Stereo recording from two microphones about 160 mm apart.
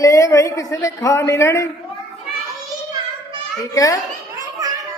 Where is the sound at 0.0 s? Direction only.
20° left (ahead or behind).